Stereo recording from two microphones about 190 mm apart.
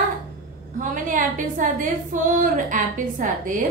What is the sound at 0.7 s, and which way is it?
A woman's voice, 45° right (ahead or behind).